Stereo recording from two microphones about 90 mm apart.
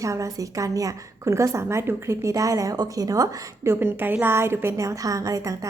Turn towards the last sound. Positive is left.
turn(degrees=-40)  # may be behind; listen again after turning